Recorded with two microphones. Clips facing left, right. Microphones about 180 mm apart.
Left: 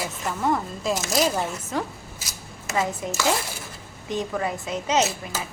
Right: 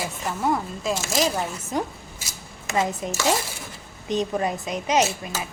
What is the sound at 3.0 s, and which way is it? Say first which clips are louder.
A woman's voice: right 1 dB; 20° right (ahead or behind).